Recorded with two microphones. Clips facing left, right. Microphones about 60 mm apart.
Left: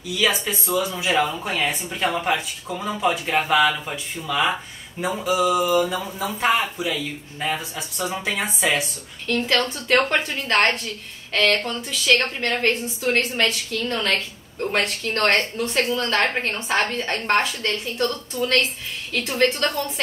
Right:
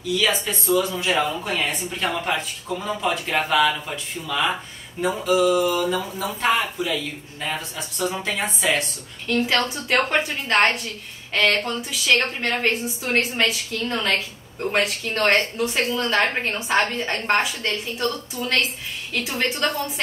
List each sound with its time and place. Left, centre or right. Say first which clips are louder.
0.1 s speech: even; centre
9.8 s a woman's voice: left 3 dB; centre